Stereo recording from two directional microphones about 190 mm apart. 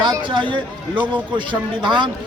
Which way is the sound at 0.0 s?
25° right (ahead or behind).